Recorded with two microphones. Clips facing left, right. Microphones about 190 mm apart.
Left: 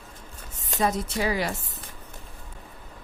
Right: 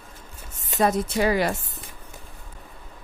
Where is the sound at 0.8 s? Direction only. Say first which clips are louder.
Right 4 dB; 55° right (ahead or behind).